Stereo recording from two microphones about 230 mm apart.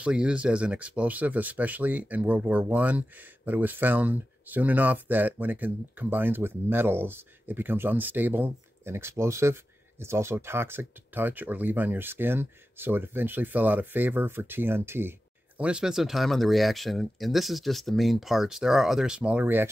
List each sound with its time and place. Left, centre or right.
0.0 s speech: centre